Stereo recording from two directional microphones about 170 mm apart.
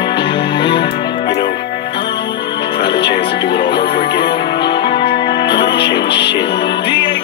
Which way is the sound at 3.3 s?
80° left.